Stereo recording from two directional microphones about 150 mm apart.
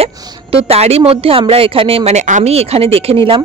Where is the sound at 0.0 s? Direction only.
40° right (ahead or behind).